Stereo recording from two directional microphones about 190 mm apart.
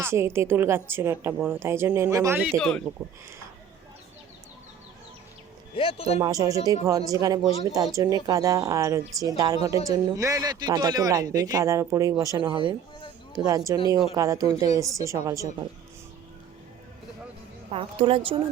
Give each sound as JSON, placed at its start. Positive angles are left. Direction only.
{"t": 0.0, "sound": "speech", "side_deg": -10}
{"t": 2.6, "sound": "speech", "side_deg": 5}
{"t": 5.7, "sound": "speech", "side_deg": 30}
{"t": 6.1, "sound": "a woman's voice", "side_deg": -20}
{"t": 17.7, "sound": "a woman's voice", "side_deg": -30}